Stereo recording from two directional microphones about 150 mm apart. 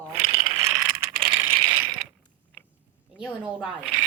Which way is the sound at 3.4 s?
5° right (ahead or behind).